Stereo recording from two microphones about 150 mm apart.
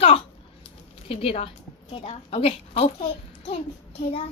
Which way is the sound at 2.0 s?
45° left (ahead or behind).